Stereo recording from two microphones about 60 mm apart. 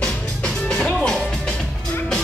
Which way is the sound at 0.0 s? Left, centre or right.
Centre.